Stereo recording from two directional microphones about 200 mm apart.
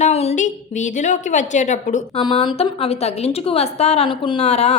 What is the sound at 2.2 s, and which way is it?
A woman's voice, 25° left (ahead or behind).